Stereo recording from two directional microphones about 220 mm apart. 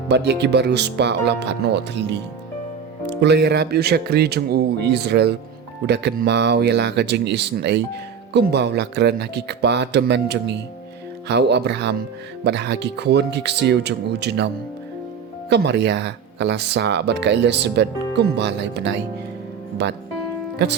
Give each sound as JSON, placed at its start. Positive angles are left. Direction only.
{"t": 0.1, "sound": "speech", "side_deg": -50}